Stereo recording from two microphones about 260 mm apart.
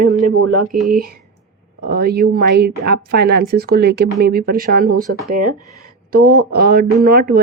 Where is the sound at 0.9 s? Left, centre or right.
Right.